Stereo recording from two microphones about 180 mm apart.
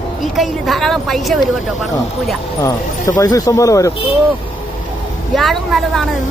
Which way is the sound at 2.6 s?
20° left (ahead or behind).